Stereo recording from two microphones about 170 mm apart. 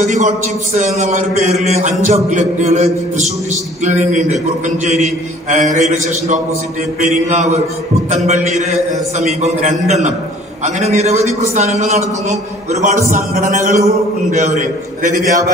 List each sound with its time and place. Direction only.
0.0 s a man's voice: 45° right (ahead or behind)
15.2 s a man's voice: 20° right (ahead or behind)